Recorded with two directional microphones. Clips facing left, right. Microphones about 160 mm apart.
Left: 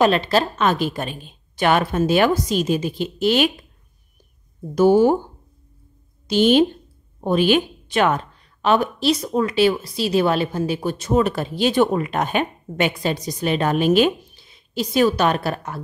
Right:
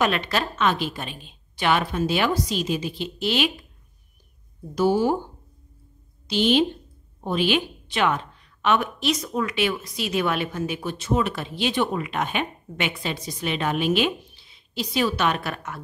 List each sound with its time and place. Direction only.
0.0 s a woman's voice: 35° left (ahead or behind)
4.7 s a woman's voice: 50° left (ahead or behind)
6.2 s a woman's voice: 45° left (ahead or behind)